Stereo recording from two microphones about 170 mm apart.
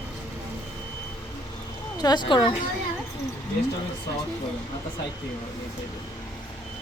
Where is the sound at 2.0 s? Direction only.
25° left (ahead or behind).